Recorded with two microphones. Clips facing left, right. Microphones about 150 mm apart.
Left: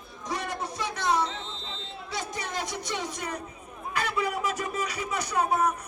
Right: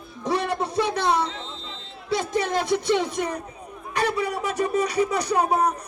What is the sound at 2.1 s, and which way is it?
Speech, 65° right (ahead or behind).